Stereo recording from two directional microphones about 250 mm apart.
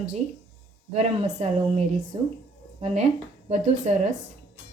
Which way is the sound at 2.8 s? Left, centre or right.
Right.